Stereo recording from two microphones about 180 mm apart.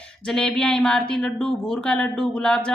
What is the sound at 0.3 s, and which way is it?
Speech, 5° left (ahead or behind).